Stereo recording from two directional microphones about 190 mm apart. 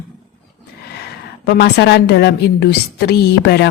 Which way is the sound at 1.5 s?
60° left (ahead or behind).